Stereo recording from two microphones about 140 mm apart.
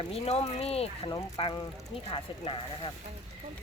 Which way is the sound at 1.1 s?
25° left (ahead or behind).